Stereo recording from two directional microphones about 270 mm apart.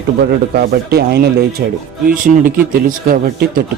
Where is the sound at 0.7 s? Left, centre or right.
Right.